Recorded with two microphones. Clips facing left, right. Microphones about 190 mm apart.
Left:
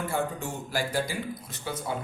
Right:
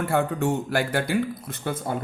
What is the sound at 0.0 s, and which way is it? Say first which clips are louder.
A man's voice: right 7 dB; 65° right (ahead or behind).